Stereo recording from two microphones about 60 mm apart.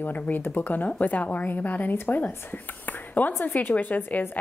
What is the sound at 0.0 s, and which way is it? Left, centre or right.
A woman's voice, left.